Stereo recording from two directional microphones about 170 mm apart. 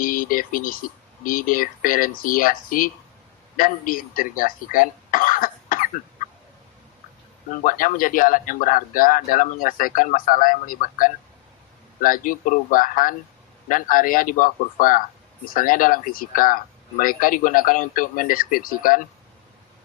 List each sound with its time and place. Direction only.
0.0 s speech: 55° left (ahead or behind)
7.6 s speech: 50° left (ahead or behind)